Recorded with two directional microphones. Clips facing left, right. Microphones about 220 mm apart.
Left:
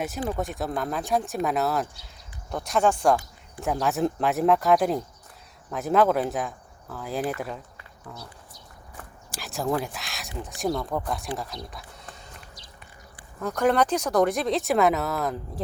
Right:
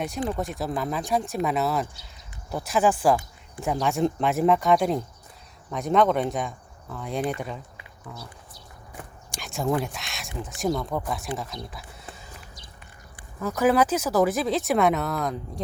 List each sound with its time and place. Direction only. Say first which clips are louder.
0.0 s speech: right 1 dB; 5° left (ahead or behind)
9.3 s speech: right 1 dB; centre (ahead or behind)
13.4 s speech: right 1 dB; 5° right (ahead or behind)